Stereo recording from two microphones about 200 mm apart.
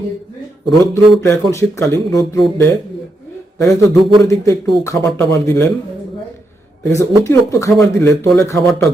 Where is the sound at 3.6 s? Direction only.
15° left (ahead or behind).